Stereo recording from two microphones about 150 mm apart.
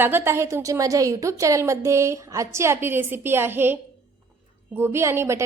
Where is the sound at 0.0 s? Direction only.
15° right (ahead or behind).